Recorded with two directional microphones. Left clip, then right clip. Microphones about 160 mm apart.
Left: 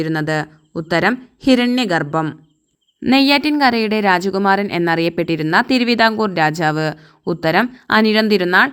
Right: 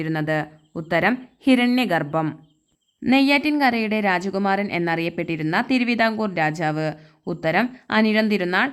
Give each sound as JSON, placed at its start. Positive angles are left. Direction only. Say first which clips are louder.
{"t": 0.0, "sound": "speech", "louder": "left 4 dB", "side_deg": 30}